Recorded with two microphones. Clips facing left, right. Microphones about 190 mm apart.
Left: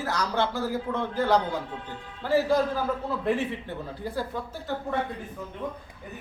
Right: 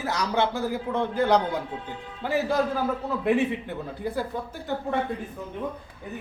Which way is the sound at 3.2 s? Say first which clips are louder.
Right 6 dB; 15° right (ahead or behind).